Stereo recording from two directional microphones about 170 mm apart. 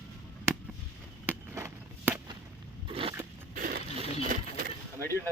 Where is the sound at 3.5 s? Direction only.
60° right (ahead or behind).